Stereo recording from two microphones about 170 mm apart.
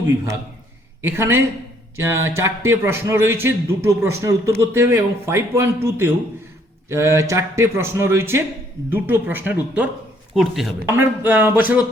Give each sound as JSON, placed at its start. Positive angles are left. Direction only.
{"t": 1.0, "sound": "a man's voice", "side_deg": -15}
{"t": 10.8, "sound": "a man's voice", "side_deg": -10}